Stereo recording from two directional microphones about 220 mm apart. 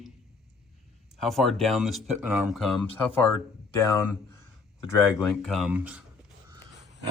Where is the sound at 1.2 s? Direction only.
Centre (ahead or behind).